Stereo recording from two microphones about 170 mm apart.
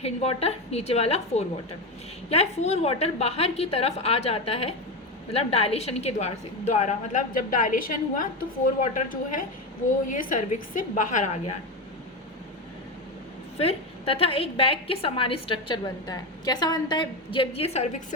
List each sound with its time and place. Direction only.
0.0 s a woman's voice: 35° left (ahead or behind)
13.6 s a woman's voice: 35° left (ahead or behind)